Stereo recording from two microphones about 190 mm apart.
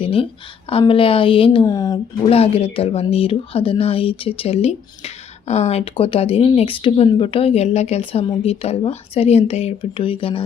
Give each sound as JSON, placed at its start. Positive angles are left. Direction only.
{"t": 0.0, "sound": "a woman's voice", "side_deg": 30}
{"t": 2.3, "sound": "speech", "side_deg": 30}